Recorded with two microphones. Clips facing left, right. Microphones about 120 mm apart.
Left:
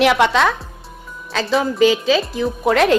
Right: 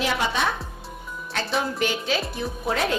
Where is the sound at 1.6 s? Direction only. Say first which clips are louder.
Left 12 dB; 90° left.